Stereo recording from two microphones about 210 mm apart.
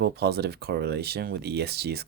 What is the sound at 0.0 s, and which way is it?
Speech, 50° right (ahead or behind).